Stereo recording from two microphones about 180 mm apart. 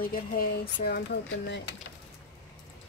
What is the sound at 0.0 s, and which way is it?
Speech, 55° left (ahead or behind).